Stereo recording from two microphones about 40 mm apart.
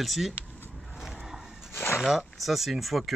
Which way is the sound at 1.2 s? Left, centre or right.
Centre.